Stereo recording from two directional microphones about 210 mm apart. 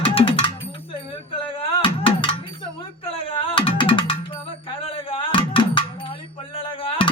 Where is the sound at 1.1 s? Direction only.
25° left (ahead or behind).